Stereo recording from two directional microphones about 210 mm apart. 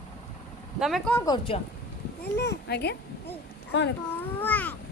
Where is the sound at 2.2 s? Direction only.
50° left (ahead or behind).